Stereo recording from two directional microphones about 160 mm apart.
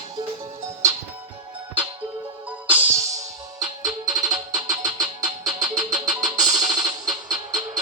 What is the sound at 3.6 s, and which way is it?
Music, 20° right (ahead or behind).